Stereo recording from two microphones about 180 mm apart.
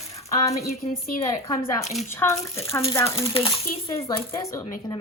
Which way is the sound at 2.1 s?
15° left (ahead or behind).